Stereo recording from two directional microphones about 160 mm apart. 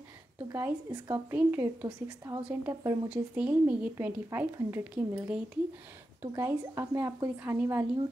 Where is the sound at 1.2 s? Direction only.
10° right (ahead or behind).